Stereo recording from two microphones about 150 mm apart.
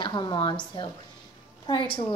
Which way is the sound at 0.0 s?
30° left (ahead or behind).